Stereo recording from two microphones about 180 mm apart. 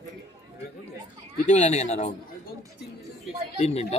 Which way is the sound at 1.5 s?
40° left (ahead or behind).